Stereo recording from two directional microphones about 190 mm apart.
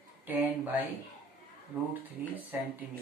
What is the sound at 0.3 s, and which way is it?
Speech, 10° right (ahead or behind).